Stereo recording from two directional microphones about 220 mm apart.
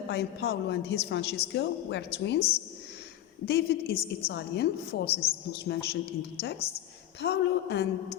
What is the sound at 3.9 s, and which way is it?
Speech, 25° left (ahead or behind).